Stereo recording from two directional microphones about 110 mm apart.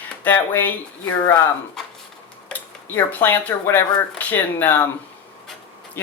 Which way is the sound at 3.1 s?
20° left (ahead or behind).